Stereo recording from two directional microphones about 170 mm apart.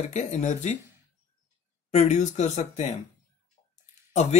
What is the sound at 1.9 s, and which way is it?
Speech, 40° left (ahead or behind).